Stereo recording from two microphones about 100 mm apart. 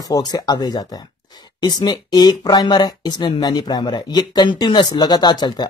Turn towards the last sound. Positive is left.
turn(degrees=45)  # may be behind; listen again after turning